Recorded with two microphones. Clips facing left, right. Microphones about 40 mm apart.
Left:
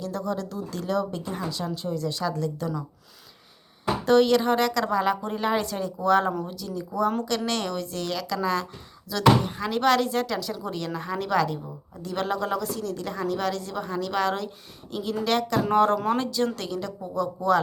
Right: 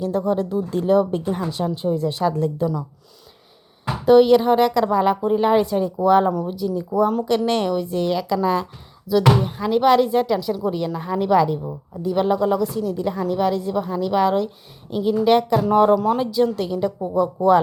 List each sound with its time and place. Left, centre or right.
0.0 s speech: right
4.0 s speech: centre
9.0 s speech: centre